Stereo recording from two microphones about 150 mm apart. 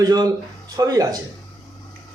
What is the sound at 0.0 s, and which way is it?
Speech, 25° right (ahead or behind).